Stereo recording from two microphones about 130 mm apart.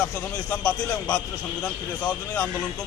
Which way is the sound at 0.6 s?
10° left (ahead or behind).